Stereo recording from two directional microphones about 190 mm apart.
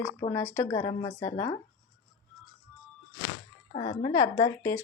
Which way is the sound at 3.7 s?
30° left (ahead or behind).